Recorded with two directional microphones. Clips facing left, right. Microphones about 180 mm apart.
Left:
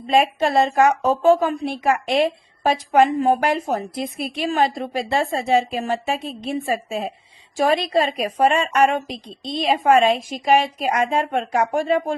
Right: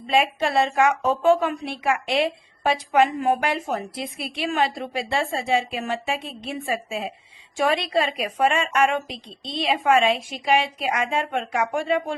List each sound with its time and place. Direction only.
0.1 s a woman's voice: 40° left (ahead or behind)